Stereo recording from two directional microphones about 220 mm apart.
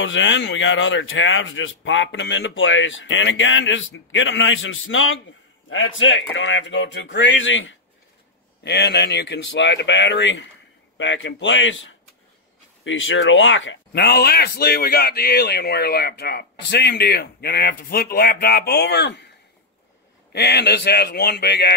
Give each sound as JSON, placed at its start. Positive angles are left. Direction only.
{"t": 0.0, "sound": "speech", "side_deg": 55}
{"t": 8.6, "sound": "speech", "side_deg": 50}
{"t": 20.3, "sound": "speech", "side_deg": 45}